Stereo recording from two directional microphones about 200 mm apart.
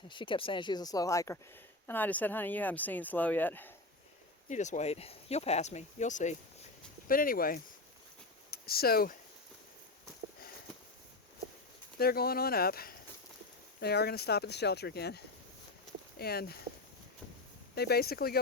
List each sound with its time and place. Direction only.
0.1 s speech: 25° left (ahead or behind); by 3.7 s 10° left (ahead or behind)
4.4 s speech: 35° left (ahead or behind)
11.9 s speech: 50° left (ahead or behind)
17.7 s speech: 50° left (ahead or behind)